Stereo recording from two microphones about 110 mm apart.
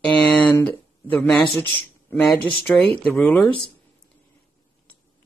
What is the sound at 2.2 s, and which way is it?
Speech, centre (ahead or behind).